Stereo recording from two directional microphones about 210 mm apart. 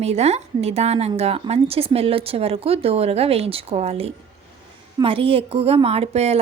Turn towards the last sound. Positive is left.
turn(degrees=-30)  # may be behind; listen again after turning